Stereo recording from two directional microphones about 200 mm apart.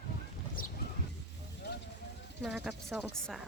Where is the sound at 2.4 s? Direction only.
Centre (ahead or behind).